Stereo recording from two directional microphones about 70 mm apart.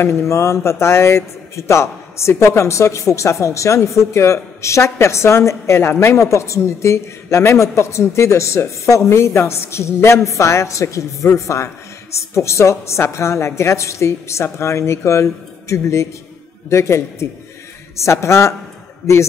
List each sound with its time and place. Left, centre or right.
0.0 s a woman's voice: left